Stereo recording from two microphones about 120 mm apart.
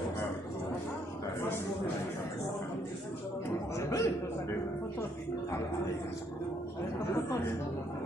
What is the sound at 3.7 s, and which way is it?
Speech, 25° left (ahead or behind).